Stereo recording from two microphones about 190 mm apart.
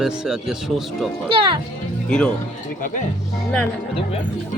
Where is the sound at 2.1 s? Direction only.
5° left (ahead or behind).